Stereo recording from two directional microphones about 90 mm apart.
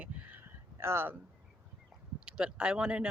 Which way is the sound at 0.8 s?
25° right (ahead or behind).